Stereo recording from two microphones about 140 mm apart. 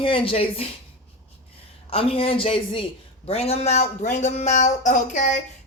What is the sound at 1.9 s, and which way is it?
A man's voice, 45° left (ahead or behind).